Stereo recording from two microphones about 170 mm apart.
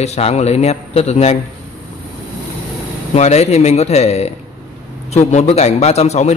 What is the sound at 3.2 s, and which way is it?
A man's voice, 40° left (ahead or behind).